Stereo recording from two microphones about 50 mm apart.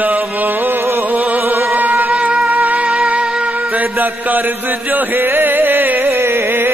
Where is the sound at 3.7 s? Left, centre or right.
Right.